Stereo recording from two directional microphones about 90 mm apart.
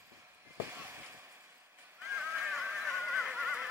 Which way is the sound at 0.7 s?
30° right (ahead or behind).